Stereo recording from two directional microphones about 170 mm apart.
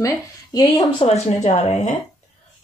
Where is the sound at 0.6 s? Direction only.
25° left (ahead or behind).